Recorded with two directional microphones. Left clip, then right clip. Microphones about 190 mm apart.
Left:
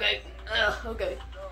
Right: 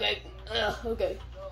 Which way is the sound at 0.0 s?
40° right (ahead or behind).